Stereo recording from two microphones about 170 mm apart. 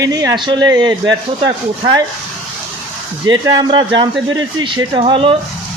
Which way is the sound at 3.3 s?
25° right (ahead or behind).